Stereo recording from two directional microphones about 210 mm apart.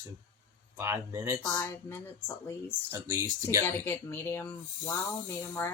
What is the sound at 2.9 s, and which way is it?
Speech, 15° right (ahead or behind).